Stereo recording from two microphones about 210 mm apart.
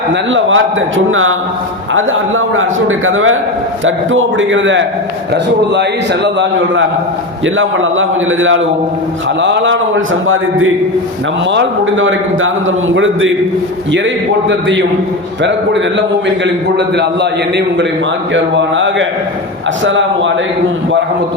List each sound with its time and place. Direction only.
0.1 s a man's voice: 65° right (ahead or behind)
6.2 s a man's voice: 55° right (ahead or behind)
7.4 s a man's voice: 70° right (ahead or behind)
18.5 s a man's voice: 60° right (ahead or behind)